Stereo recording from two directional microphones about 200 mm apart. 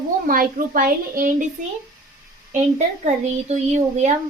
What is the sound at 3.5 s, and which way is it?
Speech, 35° right (ahead or behind).